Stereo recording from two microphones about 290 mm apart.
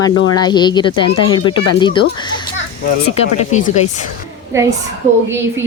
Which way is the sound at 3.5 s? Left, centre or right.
Left.